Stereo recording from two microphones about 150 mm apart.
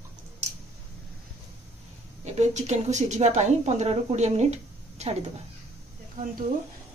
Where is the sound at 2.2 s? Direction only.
50° right (ahead or behind).